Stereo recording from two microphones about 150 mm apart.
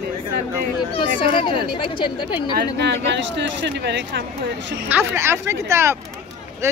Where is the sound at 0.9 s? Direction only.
35° left (ahead or behind).